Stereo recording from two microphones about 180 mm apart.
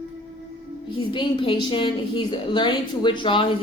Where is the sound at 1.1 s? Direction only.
30° left (ahead or behind).